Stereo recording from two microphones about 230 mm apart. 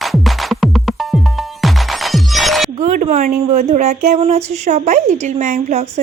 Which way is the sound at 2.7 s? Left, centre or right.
Right.